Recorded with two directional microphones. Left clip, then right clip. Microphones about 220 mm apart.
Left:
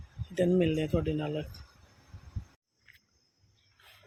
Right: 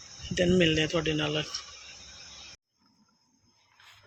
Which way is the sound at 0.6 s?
5° left (ahead or behind).